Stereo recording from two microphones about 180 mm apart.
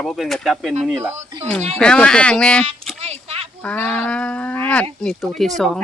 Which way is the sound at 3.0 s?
35° right (ahead or behind).